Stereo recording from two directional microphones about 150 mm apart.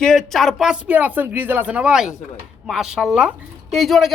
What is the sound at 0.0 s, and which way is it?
Speech, 5° left (ahead or behind).